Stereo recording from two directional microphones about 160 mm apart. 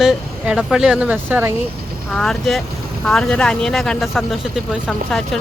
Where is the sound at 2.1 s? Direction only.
5° left (ahead or behind).